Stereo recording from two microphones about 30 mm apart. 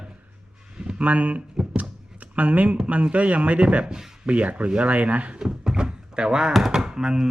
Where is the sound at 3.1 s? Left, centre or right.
Right.